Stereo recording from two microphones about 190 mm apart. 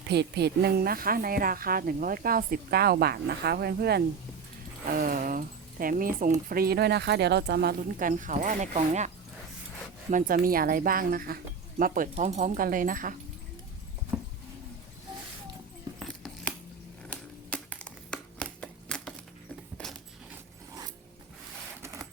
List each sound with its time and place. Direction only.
0.1 s a woman's voice: 60° right (ahead or behind)
14.1 s horse: 5° right (ahead or behind)
16.0 s a sound: 5° left (ahead or behind)
21.8 s printer: 15° right (ahead or behind)